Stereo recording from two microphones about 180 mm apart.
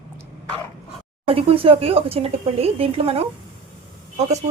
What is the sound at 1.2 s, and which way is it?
Speech, 30° right (ahead or behind).